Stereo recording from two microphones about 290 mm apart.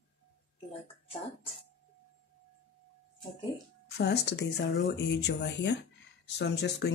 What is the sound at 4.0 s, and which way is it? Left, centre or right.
Speech, left.